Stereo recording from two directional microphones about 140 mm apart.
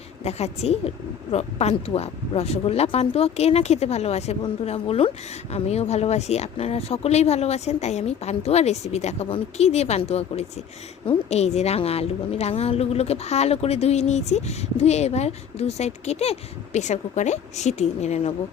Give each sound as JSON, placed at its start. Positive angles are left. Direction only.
{"t": 0.3, "sound": "a woman's voice", "side_deg": 50}